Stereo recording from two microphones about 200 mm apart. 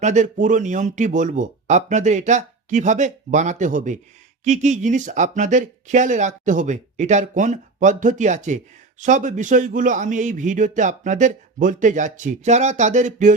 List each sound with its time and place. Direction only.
0.0 s speech: 35° right (ahead or behind)